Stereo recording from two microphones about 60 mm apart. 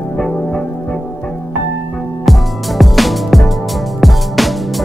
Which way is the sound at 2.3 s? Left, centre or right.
Centre.